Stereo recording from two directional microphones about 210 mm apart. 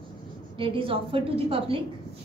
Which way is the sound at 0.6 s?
25° right (ahead or behind).